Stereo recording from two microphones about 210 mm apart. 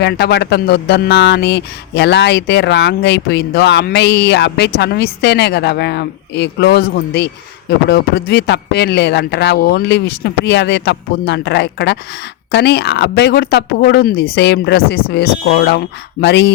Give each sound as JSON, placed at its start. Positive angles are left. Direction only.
{"t": 0.0, "sound": "speech", "side_deg": 55}